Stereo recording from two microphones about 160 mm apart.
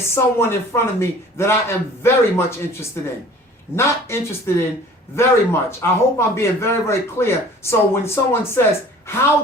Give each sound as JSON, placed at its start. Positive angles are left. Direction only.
{"t": 0.1, "sound": "a man's voice", "side_deg": 15}